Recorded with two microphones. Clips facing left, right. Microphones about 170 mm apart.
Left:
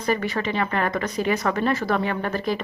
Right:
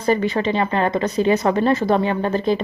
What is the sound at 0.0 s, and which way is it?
A woman's voice, 25° right (ahead or behind).